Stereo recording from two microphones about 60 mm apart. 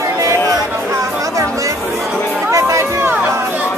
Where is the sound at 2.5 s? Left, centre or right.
Right.